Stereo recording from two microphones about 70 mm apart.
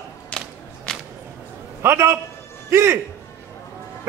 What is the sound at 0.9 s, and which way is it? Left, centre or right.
Whip, centre.